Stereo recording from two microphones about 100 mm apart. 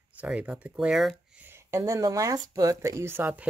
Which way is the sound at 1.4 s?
25° right (ahead or behind).